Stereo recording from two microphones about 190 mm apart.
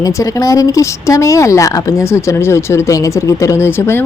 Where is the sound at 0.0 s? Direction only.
15° left (ahead or behind).